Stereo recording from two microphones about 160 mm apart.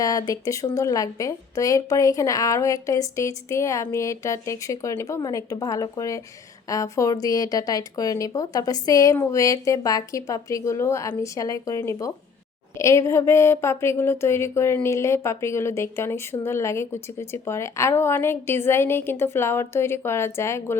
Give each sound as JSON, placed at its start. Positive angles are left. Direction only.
{"t": 0.0, "sound": "speech", "side_deg": 20}